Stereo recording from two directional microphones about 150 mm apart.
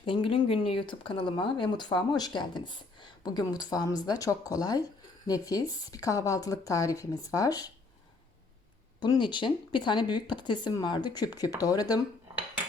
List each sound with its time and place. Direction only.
0.0 s speech: 35° left (ahead or behind)
9.0 s speech: 30° left (ahead or behind)